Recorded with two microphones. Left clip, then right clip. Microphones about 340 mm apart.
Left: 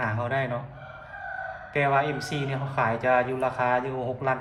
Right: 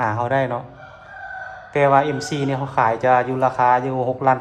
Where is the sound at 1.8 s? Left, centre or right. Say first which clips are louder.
Right 8 dB; right.